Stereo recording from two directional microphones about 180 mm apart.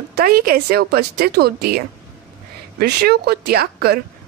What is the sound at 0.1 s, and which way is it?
A woman's voice, 55° right (ahead or behind).